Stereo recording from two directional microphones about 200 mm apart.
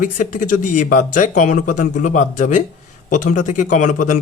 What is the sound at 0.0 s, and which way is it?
Speech, 40° left (ahead or behind).